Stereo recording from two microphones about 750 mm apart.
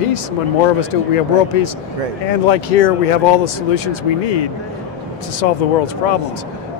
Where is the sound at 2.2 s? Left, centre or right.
Left.